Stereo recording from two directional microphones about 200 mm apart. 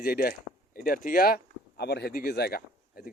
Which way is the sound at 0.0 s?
50° left (ahead or behind).